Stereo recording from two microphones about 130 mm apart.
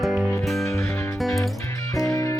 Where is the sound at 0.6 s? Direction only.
20° left (ahead or behind).